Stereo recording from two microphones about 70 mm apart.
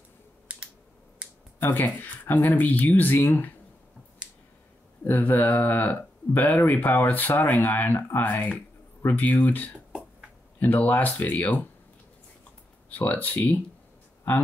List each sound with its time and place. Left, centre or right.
1.6 s speech: left
5.0 s speech: left
12.9 s speech: left